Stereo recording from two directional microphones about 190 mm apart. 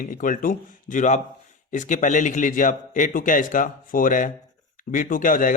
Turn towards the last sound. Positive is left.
turn(degrees=45)  # may be behind; listen again after turning